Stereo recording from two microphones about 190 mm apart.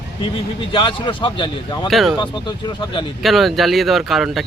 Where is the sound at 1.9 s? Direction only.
Centre (ahead or behind).